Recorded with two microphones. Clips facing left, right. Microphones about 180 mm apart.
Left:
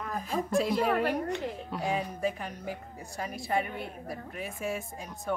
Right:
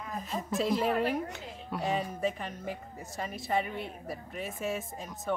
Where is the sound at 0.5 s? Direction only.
Centre (ahead or behind).